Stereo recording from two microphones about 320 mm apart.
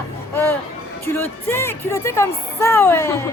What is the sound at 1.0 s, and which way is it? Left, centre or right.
Speech, centre.